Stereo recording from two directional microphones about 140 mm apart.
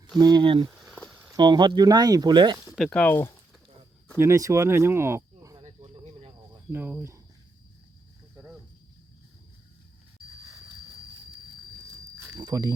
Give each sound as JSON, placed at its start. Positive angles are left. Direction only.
{"t": 0.2, "sound": "speech", "side_deg": -30}
{"t": 0.9, "sound": "a sound", "side_deg": 5}
{"t": 1.3, "sound": "speech", "side_deg": -30}
{"t": 2.7, "sound": "speech", "side_deg": 5}
{"t": 4.2, "sound": "speech", "side_deg": -20}
{"t": 5.6, "sound": "cricket", "side_deg": -45}
{"t": 6.7, "sound": "speech", "side_deg": -15}
{"t": 12.4, "sound": "a sound", "side_deg": -25}